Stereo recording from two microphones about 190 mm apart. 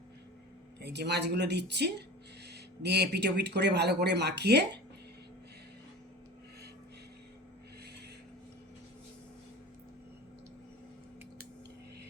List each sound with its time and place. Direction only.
0.8 s speech: 65° right (ahead or behind)